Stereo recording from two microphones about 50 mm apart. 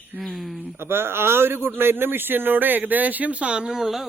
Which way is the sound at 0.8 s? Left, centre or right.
Right.